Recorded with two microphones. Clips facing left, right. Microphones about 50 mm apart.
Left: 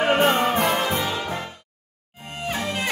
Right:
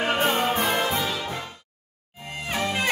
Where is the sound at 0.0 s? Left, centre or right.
Left.